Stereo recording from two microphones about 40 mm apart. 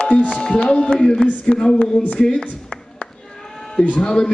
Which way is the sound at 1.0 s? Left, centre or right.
Centre.